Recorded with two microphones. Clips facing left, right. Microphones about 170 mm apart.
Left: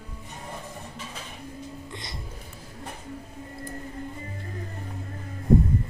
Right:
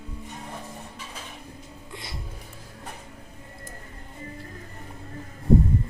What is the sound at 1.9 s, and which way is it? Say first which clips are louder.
Music: even; 5° right (ahead or behind).